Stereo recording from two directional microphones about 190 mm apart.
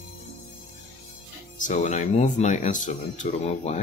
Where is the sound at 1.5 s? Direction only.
40° left (ahead or behind).